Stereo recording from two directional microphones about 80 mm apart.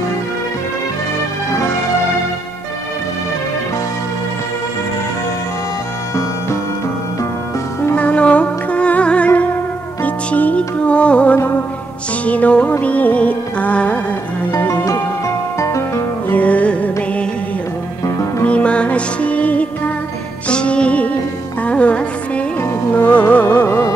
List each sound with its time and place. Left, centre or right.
7.9 s music: centre
14.7 s music: left
16.3 s music: centre
18.4 s music: centre